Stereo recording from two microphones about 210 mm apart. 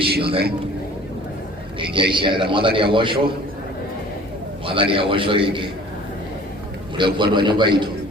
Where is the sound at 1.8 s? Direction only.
25° right (ahead or behind).